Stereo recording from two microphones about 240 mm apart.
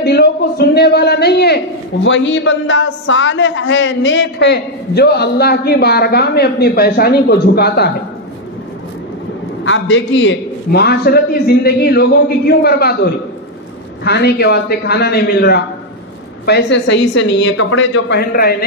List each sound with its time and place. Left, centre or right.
0.0 s a sound: left
2.0 s a man's voice: left
9.7 s a man's voice: left
14.0 s a man's voice: left